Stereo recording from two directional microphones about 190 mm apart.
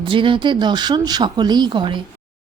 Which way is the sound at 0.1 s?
25° right (ahead or behind).